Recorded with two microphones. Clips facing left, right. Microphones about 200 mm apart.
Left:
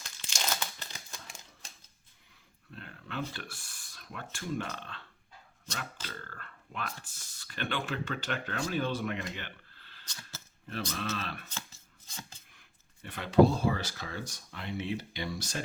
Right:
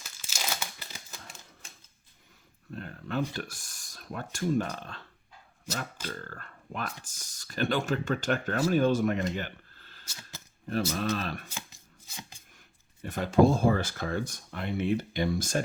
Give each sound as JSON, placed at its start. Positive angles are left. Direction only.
{"t": 0.0, "sound": "crumpling", "side_deg": -5}
{"t": 2.7, "sound": "speech", "side_deg": -40}
{"t": 5.6, "sound": "speech", "side_deg": -10}
{"t": 6.2, "sound": "speech", "side_deg": -40}
{"t": 11.2, "sound": "speech", "side_deg": -40}
{"t": 11.4, "sound": "chopping", "side_deg": -10}
{"t": 12.5, "sound": "speech", "side_deg": -45}